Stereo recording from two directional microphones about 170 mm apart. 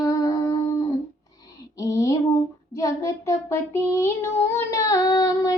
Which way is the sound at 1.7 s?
20° left (ahead or behind).